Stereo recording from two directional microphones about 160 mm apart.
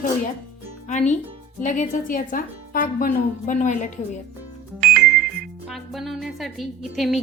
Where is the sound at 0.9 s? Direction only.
50° left (ahead or behind).